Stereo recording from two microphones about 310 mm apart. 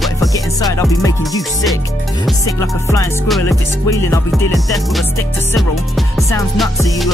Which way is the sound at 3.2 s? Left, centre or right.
Centre.